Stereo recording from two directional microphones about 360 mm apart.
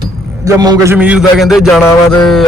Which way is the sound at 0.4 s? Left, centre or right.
Centre.